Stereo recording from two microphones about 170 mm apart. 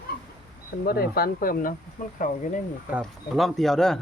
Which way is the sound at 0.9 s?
60° left (ahead or behind).